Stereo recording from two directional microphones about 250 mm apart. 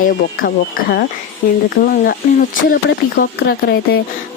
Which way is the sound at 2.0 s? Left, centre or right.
Left.